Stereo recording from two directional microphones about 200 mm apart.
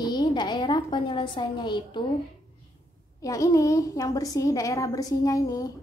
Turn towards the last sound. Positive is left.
turn(degrees=15)  # may be behind; listen again after turning